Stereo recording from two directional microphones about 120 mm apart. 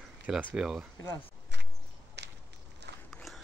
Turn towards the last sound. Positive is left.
turn(degrees=0)  # may be behind; listen again after turning